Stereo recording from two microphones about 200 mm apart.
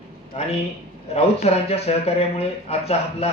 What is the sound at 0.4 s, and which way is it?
Speech, 30° left (ahead or behind).